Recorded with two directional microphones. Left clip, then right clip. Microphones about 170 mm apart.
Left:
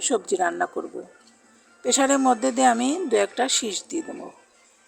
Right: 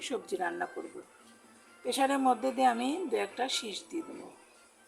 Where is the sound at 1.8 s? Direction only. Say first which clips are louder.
Left 8 dB; 40° left (ahead or behind).